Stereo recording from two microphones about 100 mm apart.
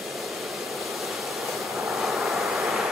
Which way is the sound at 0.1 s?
Centre (ahead or behind).